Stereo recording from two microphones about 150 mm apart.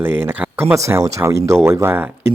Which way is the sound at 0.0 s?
15° right (ahead or behind).